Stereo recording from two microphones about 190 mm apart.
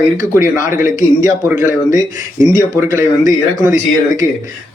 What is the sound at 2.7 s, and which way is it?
Speech, 15° right (ahead or behind).